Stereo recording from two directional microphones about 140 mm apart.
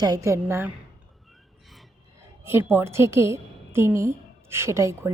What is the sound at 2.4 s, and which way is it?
A woman's voice, 15° right (ahead or behind).